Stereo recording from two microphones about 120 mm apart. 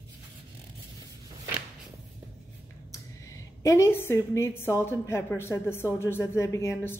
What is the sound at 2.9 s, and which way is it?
A woman's voice, 25° left (ahead or behind).